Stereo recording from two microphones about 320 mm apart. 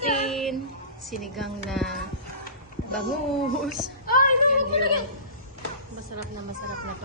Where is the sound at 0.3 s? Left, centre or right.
Centre.